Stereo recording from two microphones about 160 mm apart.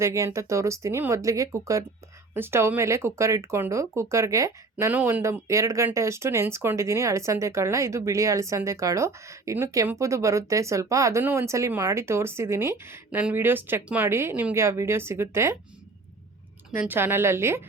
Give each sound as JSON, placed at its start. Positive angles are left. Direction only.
{"t": 0.0, "sound": "speech", "side_deg": -20}
{"t": 16.7, "sound": "speech", "side_deg": -10}